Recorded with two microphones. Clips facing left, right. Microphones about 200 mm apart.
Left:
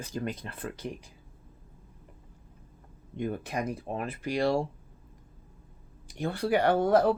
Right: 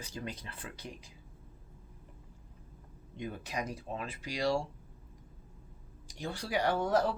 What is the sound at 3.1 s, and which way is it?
Speech, 55° left (ahead or behind).